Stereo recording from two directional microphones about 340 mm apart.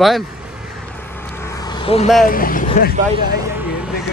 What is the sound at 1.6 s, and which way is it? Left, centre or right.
Vehicle, centre.